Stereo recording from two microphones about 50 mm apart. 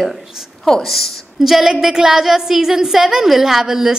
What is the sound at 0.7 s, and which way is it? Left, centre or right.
A woman's voice, centre.